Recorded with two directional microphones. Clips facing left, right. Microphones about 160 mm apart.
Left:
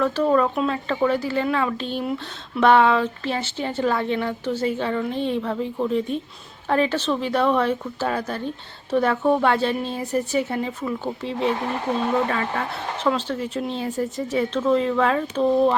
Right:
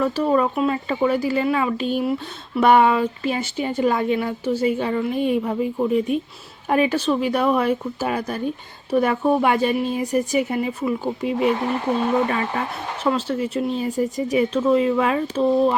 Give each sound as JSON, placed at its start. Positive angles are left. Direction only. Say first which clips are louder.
{"t": 0.0, "sound": "speech", "louder": "even", "side_deg": -10}